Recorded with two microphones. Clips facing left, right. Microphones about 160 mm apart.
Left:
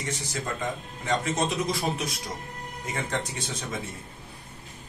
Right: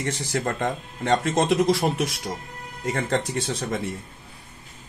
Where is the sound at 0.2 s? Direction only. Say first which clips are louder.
Right 6 dB; 60° right (ahead or behind).